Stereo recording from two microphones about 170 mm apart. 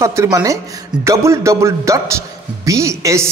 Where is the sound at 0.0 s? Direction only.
15° right (ahead or behind).